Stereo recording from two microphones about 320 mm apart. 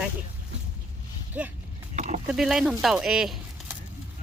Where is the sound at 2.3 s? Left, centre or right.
Centre.